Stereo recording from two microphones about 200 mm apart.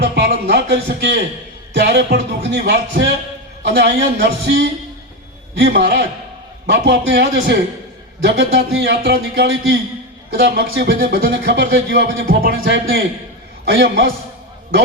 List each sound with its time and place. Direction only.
0.0 s a man's voice: 55° right (ahead or behind)
8.5 s speech: 55° right (ahead or behind)
13.7 s a man's voice: 60° right (ahead or behind)